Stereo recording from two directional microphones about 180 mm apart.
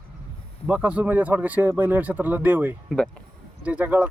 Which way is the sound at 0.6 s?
5° right (ahead or behind).